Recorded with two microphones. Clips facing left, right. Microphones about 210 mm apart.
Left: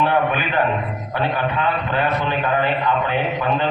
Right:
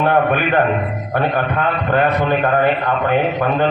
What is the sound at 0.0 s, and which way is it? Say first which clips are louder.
A man's voice: right 4 dB; 50° right (ahead or behind).